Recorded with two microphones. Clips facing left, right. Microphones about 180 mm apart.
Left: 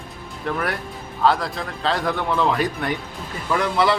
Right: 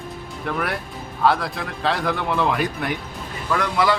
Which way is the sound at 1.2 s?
Centre (ahead or behind).